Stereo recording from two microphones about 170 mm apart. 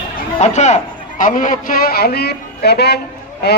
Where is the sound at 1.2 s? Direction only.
50° left (ahead or behind); by 2.9 s 75° left (ahead or behind).